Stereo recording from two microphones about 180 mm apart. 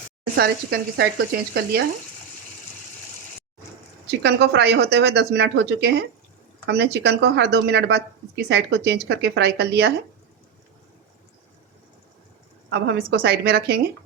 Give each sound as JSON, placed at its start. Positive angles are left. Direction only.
{"t": 0.3, "sound": "speech", "side_deg": -65}
{"t": 4.0, "sound": "a woman's voice", "side_deg": -70}
{"t": 12.7, "sound": "speech", "side_deg": -65}